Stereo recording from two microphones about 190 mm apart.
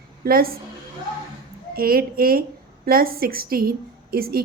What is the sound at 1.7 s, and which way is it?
A woman's voice, 50° right (ahead or behind).